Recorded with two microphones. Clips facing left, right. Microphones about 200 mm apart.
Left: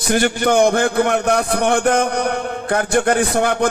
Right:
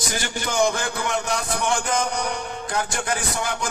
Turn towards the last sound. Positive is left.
turn(degrees=60)  # may be behind; listen again after turning